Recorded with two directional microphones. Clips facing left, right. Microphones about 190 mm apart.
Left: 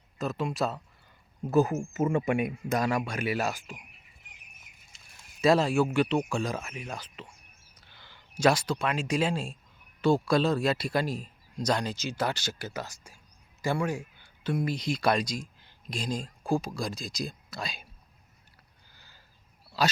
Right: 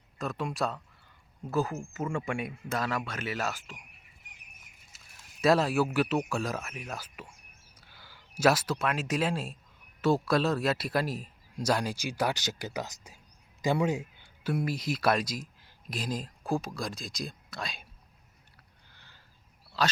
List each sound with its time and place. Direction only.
0.2 s speech: centre (ahead or behind)
1.5 s speech: 20° left (ahead or behind)
4.9 s speech: 5° right (ahead or behind); by 14.3 s 20° right (ahead or behind)
14.4 s speech: 5° right (ahead or behind)
18.9 s a sound: 5° left (ahead or behind)
19.8 s speech: 10° left (ahead or behind)